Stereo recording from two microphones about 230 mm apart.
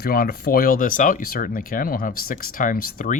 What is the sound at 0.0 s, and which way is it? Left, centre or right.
Speech, left.